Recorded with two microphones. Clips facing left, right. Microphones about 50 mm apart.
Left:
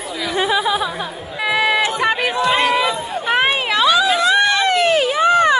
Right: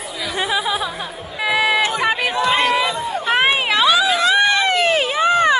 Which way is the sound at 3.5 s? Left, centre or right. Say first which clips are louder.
Right 1 dB; right.